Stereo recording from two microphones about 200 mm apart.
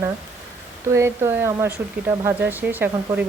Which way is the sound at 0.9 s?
15° right (ahead or behind).